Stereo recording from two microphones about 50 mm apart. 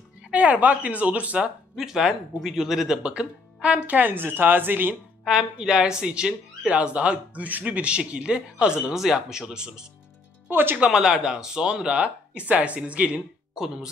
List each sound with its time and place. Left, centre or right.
0.3 s a woman's voice: right
1.8 s speech: centre
3.0 s speech: right
5.2 s a woman's voice: centre
8.9 s speech: centre
10.5 s speech: right
10.8 s a woman's voice: centre